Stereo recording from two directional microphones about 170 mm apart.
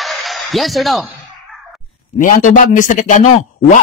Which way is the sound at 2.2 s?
50° left (ahead or behind).